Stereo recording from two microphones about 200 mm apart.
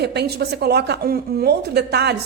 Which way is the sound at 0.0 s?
55° right (ahead or behind).